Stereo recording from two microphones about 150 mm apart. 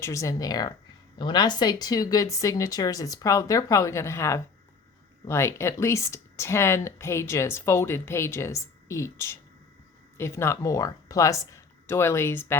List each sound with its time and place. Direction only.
0.0 s speech: 20° left (ahead or behind)